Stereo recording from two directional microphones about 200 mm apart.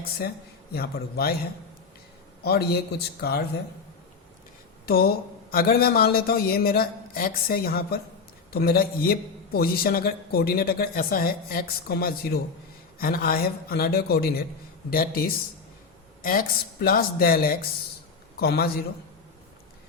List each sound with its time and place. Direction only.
0.7 s a man's voice: 50° left (ahead or behind)
2.4 s a man's voice: 50° left (ahead or behind)
4.9 s a man's voice: 50° left (ahead or behind)
16.2 s a man's voice: 45° left (ahead or behind)